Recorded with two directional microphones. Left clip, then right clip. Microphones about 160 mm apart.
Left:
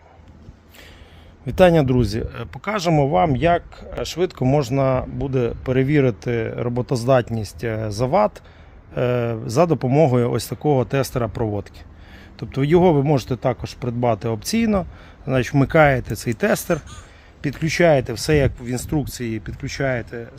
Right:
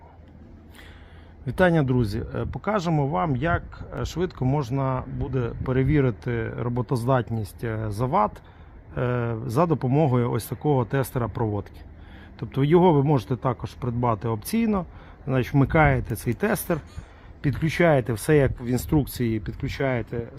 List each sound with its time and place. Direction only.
1.5 s speech: 45° left (ahead or behind)
12.4 s speech: 30° left (ahead or behind); by 20.2 s centre (ahead or behind)